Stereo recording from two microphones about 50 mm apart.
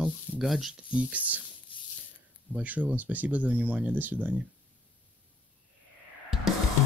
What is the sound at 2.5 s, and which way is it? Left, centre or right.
Speech, right.